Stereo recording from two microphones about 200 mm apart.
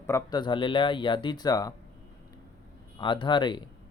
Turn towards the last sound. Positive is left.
turn(degrees=20)  # may be behind; listen again after turning